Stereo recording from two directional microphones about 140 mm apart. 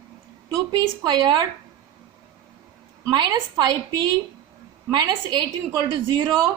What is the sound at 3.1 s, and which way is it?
A woman's voice, 30° right (ahead or behind).